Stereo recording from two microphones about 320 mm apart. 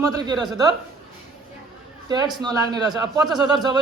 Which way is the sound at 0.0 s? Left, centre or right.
Centre.